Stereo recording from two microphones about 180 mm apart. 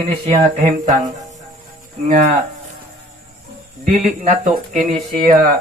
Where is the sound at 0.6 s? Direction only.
45° right (ahead or behind).